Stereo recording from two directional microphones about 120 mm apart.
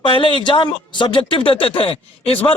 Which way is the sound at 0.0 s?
45° left (ahead or behind).